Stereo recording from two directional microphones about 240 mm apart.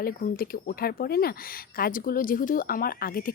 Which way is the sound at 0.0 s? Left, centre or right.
Left.